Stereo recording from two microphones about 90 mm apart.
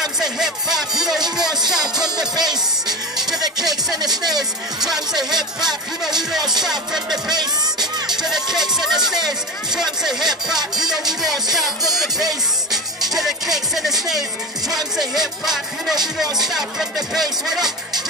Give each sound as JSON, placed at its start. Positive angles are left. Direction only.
{"t": 0.0, "sound": "speech", "side_deg": -5}
{"t": 2.0, "sound": "speech", "side_deg": -50}
{"t": 3.2, "sound": "music", "side_deg": -5}
{"t": 3.9, "sound": "speech", "side_deg": -50}
{"t": 4.3, "sound": "speech", "side_deg": -5}
{"t": 7.2, "sound": "speech", "side_deg": -50}
{"t": 8.1, "sound": "speech", "side_deg": -5}
{"t": 12.7, "sound": "music", "side_deg": 0}
{"t": 15.0, "sound": "speech", "side_deg": 0}